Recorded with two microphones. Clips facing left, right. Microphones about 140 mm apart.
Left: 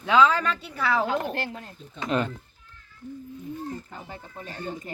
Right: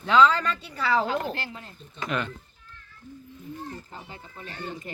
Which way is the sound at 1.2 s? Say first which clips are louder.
Left 2 dB; 55° left (ahead or behind).